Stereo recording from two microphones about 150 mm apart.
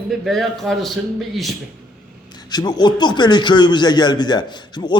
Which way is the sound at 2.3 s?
25° left (ahead or behind).